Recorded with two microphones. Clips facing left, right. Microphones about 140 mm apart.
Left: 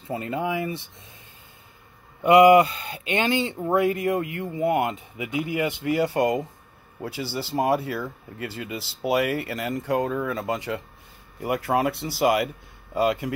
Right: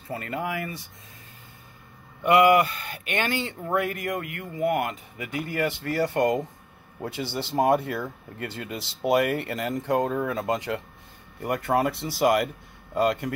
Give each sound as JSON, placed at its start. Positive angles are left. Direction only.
{"t": 0.1, "sound": "speech", "side_deg": 20}
{"t": 2.2, "sound": "speech", "side_deg": 20}
{"t": 6.0, "sound": "speech", "side_deg": 5}